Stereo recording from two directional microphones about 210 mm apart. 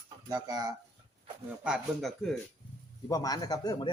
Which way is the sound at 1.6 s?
Centre (ahead or behind).